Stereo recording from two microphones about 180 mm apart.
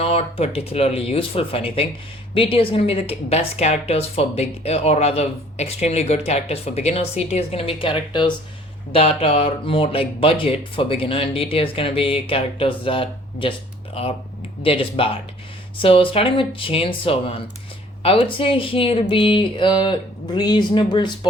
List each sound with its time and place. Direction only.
0.0 s a woman's voice: 35° left (ahead or behind)
14.6 s a woman's voice: 30° left (ahead or behind)